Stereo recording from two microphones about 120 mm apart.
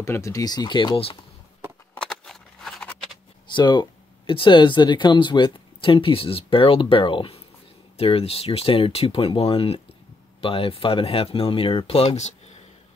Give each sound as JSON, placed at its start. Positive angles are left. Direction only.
{"t": 0.0, "sound": "speech", "side_deg": 25}
{"t": 2.0, "sound": "a sound", "side_deg": 5}
{"t": 3.5, "sound": "speech", "side_deg": 40}